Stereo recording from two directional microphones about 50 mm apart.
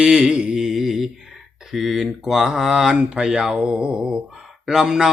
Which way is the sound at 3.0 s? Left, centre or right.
Centre.